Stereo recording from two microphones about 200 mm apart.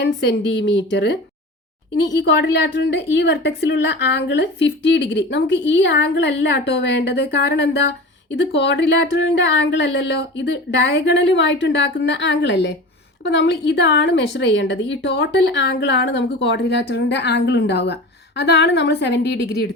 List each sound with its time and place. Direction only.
0.0 s a woman's voice: 55° left (ahead or behind)